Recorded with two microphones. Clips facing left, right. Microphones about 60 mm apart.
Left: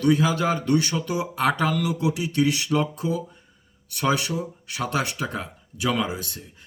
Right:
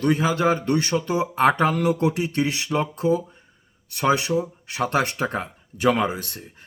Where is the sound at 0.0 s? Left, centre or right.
Right.